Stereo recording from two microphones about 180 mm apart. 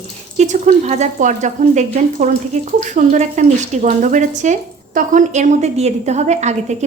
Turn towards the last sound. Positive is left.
turn(degrees=-40)  # may be behind; listen again after turning